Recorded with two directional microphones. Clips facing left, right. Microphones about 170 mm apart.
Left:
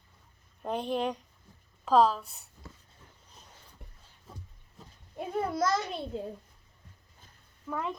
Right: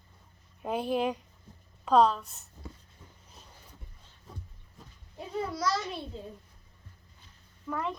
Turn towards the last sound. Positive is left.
turn(degrees=5)  # may be behind; listen again after turning